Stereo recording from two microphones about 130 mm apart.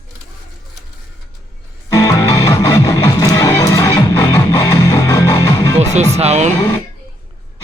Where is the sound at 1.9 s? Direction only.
25° left (ahead or behind).